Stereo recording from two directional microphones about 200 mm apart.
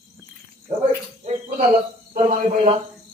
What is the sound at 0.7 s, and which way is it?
Speech, 15° right (ahead or behind).